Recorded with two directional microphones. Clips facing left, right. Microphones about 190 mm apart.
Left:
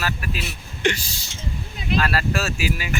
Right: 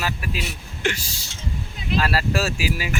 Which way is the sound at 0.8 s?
5° right (ahead or behind).